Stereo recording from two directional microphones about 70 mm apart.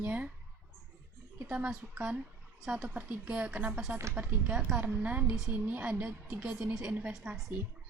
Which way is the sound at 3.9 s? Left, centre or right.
Right.